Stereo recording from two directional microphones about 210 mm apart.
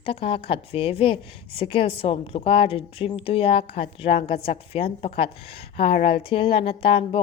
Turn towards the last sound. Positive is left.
turn(degrees=25)  # may be behind; listen again after turning